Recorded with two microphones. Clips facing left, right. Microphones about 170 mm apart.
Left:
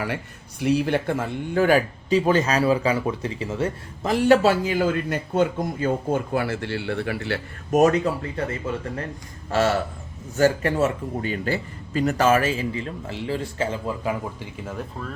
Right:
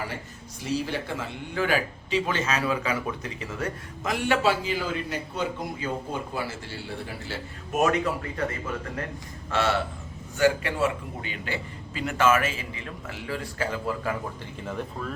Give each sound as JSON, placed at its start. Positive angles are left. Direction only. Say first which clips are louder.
{"t": 0.6, "sound": "speech", "louder": "left 8 dB", "side_deg": 60}
{"t": 7.7, "sound": "a man's voice", "louder": "left 6 dB", "side_deg": 35}
{"t": 9.5, "sound": "a man's voice", "louder": "left 4 dB", "side_deg": 40}